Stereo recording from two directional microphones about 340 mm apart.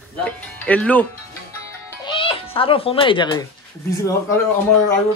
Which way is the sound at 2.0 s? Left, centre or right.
Centre.